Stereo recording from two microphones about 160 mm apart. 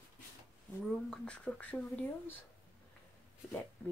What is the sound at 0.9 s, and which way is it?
Speech, 5° left (ahead or behind).